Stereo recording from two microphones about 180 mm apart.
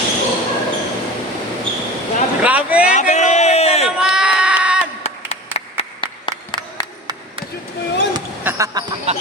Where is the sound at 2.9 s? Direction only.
40° left (ahead or behind).